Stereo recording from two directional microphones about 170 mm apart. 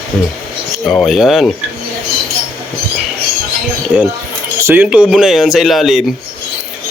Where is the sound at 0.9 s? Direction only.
Centre (ahead or behind).